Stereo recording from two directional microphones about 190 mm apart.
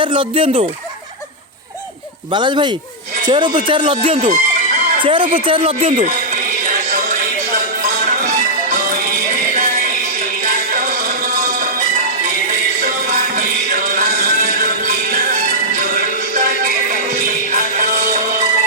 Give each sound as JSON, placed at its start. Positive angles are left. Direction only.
{"t": 0.0, "sound": "speech", "side_deg": -25}
{"t": 2.3, "sound": "speech", "side_deg": -25}
{"t": 4.3, "sound": "music", "side_deg": -40}
{"t": 5.0, "sound": "speech", "side_deg": -25}
{"t": 6.0, "sound": "music", "side_deg": -45}
{"t": 9.5, "sound": "music", "side_deg": -45}